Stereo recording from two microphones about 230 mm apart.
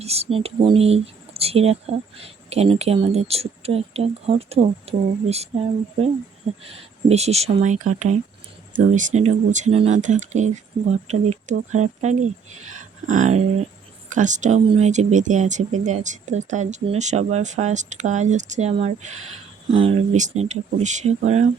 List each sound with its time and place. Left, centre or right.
0.0 s speech: right
6.7 s speech: right